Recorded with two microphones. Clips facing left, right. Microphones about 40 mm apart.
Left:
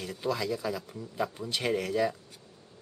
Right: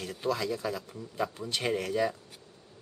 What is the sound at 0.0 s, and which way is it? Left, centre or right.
Speech, centre.